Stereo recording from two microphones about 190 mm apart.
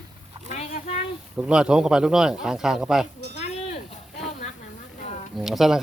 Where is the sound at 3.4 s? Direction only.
35° left (ahead or behind).